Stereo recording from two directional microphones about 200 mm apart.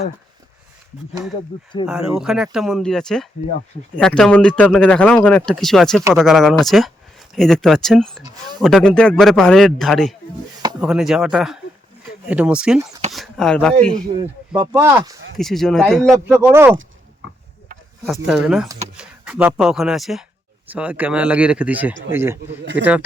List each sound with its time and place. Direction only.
1.9 s speech: 5° right (ahead or behind)
13.9 s a man's voice: 25° right (ahead or behind)
14.5 s speech: 10° right (ahead or behind)
15.4 s speech: centre (ahead or behind)
16.1 s speech: 10° right (ahead or behind)
18.4 s speech: centre (ahead or behind)